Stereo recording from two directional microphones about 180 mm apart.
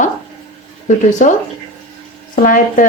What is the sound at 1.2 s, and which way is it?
Speech, 45° left (ahead or behind).